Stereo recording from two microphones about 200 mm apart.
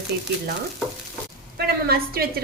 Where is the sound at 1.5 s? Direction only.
50° right (ahead or behind).